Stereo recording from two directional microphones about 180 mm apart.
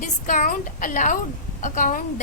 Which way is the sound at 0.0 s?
45° left (ahead or behind).